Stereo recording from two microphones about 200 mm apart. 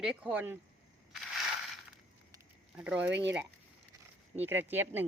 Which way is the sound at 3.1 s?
65° right (ahead or behind).